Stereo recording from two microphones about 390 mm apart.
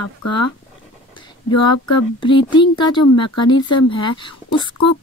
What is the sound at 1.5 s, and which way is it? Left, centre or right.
Speech, left.